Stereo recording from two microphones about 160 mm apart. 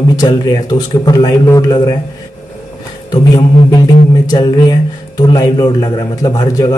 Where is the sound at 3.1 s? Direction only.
30° left (ahead or behind).